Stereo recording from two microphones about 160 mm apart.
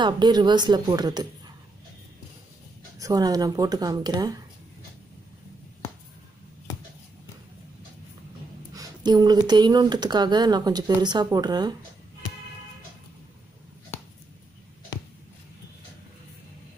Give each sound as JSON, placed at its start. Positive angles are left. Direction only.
{"t": 0.0, "sound": "speech", "side_deg": -30}
{"t": 3.0, "sound": "speech", "side_deg": -25}
{"t": 8.7, "sound": "speech", "side_deg": -25}